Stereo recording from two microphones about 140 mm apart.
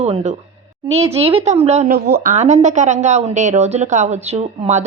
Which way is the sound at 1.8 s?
85° right.